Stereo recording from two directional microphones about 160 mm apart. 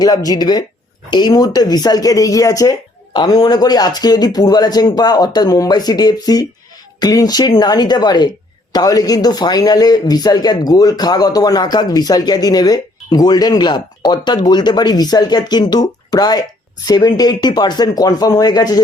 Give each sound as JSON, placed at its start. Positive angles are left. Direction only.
{"t": 0.0, "sound": "speech", "side_deg": 25}